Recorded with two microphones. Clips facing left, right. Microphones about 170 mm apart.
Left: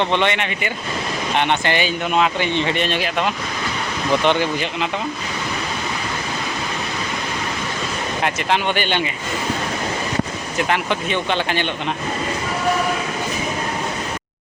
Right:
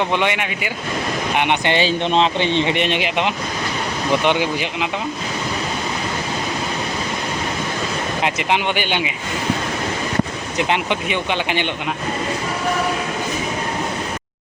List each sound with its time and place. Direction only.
0.1 s speech: 10° right (ahead or behind)
1.4 s speech: 15° right (ahead or behind)
8.2 s speech: 15° right (ahead or behind)
10.6 s speech: 20° right (ahead or behind)